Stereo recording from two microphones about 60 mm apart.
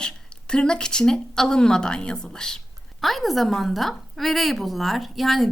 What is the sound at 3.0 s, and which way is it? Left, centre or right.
A woman's voice, centre.